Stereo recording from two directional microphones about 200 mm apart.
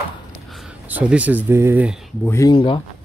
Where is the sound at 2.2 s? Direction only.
15° left (ahead or behind).